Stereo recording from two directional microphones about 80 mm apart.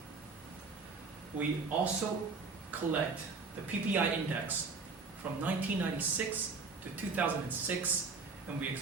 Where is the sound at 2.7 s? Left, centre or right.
Right.